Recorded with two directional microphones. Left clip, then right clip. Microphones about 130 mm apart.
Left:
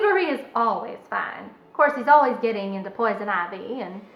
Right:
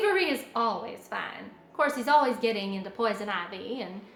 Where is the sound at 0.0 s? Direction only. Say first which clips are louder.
Left 5 dB; 45° right (ahead or behind).